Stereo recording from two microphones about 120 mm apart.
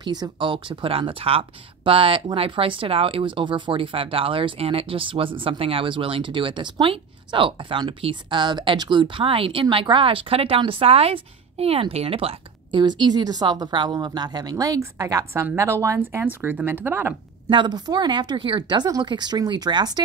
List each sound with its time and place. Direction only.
0.0 s a woman's voice: 40° right (ahead or behind)
12.8 s a woman's voice: 40° right (ahead or behind); by 17.1 s 15° right (ahead or behind)
17.5 s a woman's voice: 40° right (ahead or behind)